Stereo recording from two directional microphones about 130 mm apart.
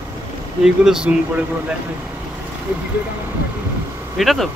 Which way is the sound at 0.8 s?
5° right (ahead or behind).